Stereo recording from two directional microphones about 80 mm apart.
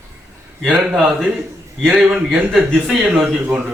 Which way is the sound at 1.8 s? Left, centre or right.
Centre.